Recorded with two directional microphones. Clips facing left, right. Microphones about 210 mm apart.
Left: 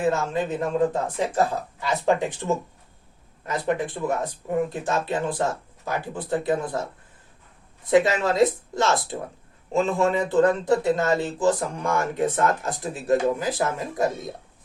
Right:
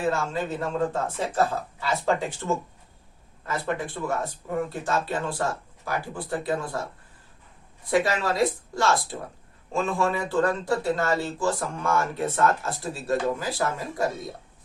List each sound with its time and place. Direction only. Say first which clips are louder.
0.0 s speech: left 3 dB; 20° left (ahead or behind)
7.9 s speech: left 4 dB; 20° left (ahead or behind)